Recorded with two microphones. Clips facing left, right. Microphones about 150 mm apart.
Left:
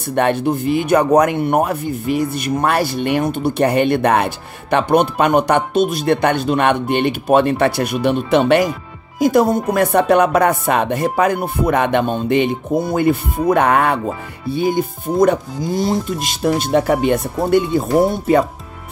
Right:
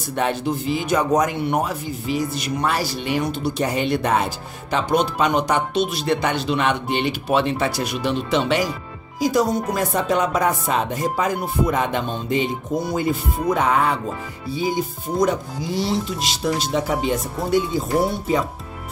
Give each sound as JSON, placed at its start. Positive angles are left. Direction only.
{"t": 0.1, "sound": "speech", "side_deg": 60}